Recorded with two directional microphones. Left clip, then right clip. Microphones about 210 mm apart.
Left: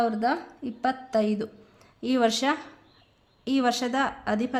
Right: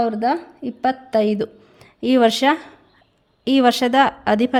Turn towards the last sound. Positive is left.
turn(degrees=-35)  # may be behind; listen again after turning